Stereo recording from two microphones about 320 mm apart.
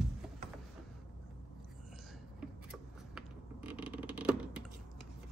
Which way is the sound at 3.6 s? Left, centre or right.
Centre.